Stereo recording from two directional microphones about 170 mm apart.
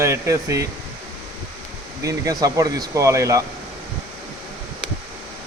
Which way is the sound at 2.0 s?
20° right (ahead or behind).